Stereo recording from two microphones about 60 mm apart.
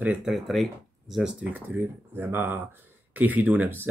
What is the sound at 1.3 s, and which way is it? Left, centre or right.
Speech, right.